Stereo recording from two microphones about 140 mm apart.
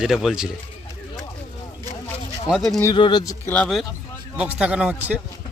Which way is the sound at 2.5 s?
Centre (ahead or behind).